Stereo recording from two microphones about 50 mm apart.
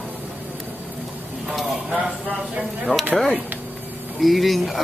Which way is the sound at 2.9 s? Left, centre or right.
Left.